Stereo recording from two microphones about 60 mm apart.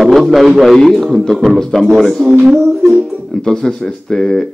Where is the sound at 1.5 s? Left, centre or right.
Centre.